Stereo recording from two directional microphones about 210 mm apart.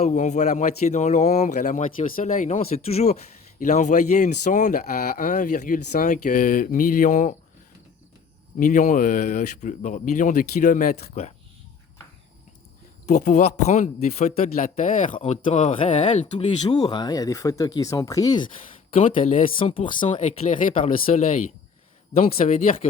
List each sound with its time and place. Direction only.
0.0 s speech: 35° left (ahead or behind)
8.5 s speech: 40° left (ahead or behind)
13.1 s speech: 35° left (ahead or behind)
15.2 s speech: 30° left (ahead or behind)
16.8 s speech: 20° left (ahead or behind); by 19.5 s 35° left (ahead or behind)
19.5 s speech: 25° left (ahead or behind)
20.2 s speech: 40° left (ahead or behind)
20.7 s speech: 25° left (ahead or behind)